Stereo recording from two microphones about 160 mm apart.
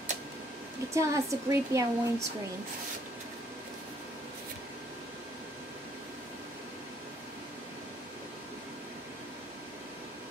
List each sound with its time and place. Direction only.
0.9 s speech: 20° right (ahead or behind)